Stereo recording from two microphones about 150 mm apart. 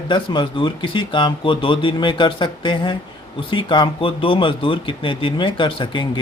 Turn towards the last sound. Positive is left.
turn(degrees=35)  # may be behind; listen again after turning